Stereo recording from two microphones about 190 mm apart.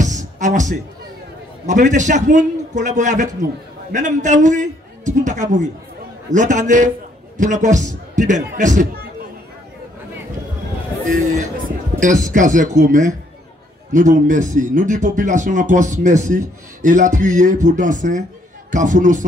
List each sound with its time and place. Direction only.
0.0 s music: 40° right (ahead or behind)
1.7 s speech: 40° right (ahead or behind)
12.0 s speech: 40° right (ahead or behind)